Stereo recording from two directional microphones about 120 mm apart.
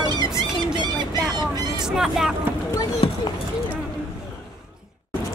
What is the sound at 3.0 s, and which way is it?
Speech, 50° left (ahead or behind).